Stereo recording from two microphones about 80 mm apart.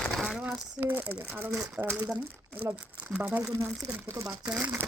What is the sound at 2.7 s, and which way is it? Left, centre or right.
Speech, centre.